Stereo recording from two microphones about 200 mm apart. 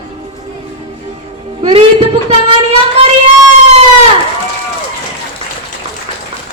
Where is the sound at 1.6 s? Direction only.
30° right (ahead or behind).